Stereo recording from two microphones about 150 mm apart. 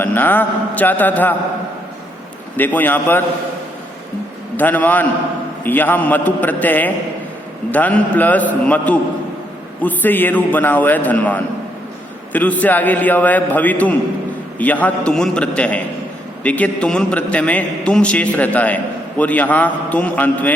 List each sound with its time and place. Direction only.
0.0 s a man's voice: 10° left (ahead or behind)
2.6 s a man's voice: 10° left (ahead or behind)
4.5 s a man's voice: 10° left (ahead or behind)